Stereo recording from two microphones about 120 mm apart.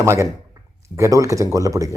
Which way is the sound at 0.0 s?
20° right (ahead or behind).